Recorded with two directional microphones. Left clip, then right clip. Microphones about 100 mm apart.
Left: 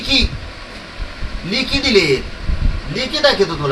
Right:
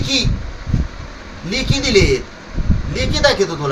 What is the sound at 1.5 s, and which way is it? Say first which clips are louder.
A man's voice: left 2 dB; 15° right (ahead or behind).